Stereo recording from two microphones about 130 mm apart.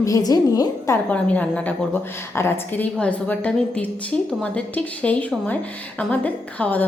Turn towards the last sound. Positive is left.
turn(degrees=10)  # may be behind; listen again after turning